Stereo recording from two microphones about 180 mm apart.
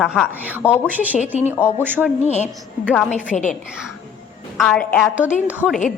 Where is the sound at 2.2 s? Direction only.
40° left (ahead or behind).